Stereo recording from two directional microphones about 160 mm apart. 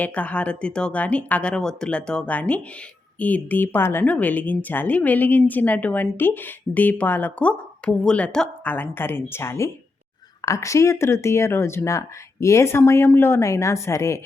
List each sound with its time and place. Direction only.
0.0 s speech: 10° left (ahead or behind)